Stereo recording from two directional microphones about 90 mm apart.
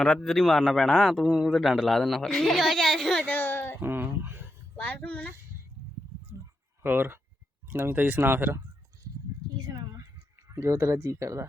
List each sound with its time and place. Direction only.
0.0 s a man's voice: 10° left (ahead or behind)
3.2 s a child's voice: 20° left (ahead or behind)
3.8 s a sound: 25° right (ahead or behind)
4.8 s a child's voice: 15° left (ahead or behind)
6.8 s speech: 20° right (ahead or behind)
10.5 s speech: 35° right (ahead or behind)